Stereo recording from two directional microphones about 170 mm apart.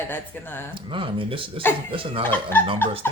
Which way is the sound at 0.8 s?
30° right (ahead or behind).